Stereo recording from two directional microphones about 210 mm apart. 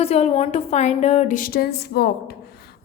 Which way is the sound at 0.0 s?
30° left (ahead or behind).